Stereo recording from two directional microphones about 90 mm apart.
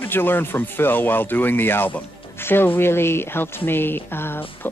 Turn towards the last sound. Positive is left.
turn(degrees=25)  # may be behind; listen again after turning